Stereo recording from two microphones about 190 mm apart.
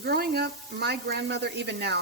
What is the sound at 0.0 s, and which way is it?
Speech, 55° right (ahead or behind).